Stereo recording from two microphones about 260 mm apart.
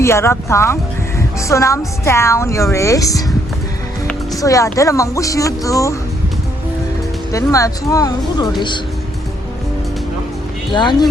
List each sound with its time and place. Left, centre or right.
0.0 s a woman's voice: centre
4.4 s a woman's voice: centre
7.3 s a woman's voice: centre
10.7 s a woman's voice: centre